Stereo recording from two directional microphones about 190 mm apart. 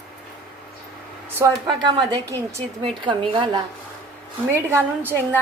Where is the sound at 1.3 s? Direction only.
10° right (ahead or behind).